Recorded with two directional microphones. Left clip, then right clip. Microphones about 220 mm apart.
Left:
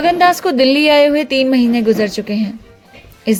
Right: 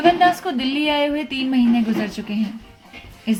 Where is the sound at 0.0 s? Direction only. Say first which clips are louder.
Left 4 dB; 50° left (ahead or behind).